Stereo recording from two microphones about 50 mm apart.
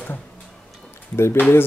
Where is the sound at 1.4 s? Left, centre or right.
Left.